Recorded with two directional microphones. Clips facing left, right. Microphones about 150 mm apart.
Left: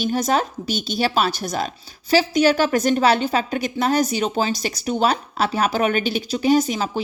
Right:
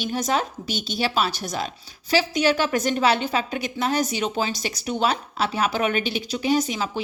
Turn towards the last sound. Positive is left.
turn(degrees=40)  # may be behind; listen again after turning